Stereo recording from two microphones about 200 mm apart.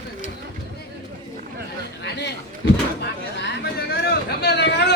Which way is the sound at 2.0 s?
60° left (ahead or behind).